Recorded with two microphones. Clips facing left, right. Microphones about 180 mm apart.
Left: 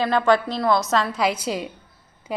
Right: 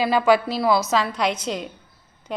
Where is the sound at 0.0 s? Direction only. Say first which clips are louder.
Right 1 dB; 5° right (ahead or behind).